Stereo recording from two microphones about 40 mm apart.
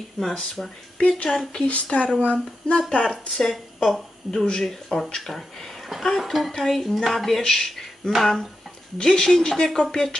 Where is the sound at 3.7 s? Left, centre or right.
Centre.